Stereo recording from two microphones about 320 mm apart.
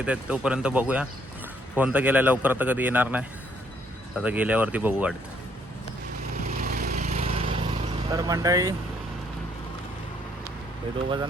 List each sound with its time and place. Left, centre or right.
0.0 s speech: centre
6.5 s vehicle: right; by 8.7 s centre